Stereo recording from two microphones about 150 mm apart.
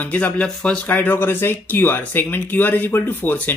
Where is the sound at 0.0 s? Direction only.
10° left (ahead or behind).